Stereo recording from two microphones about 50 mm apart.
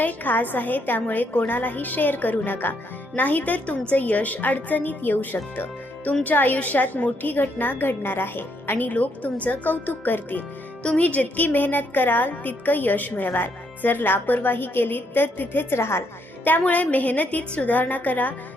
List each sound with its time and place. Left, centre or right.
0.0 s a woman's voice: left
8.9 s a woman's voice: left
16.4 s a woman's voice: left